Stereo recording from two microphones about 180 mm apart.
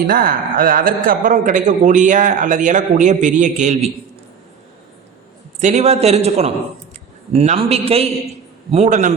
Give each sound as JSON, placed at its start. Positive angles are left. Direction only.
{"t": 0.1, "sound": "a man's voice", "side_deg": -55}
{"t": 5.5, "sound": "a man's voice", "side_deg": -40}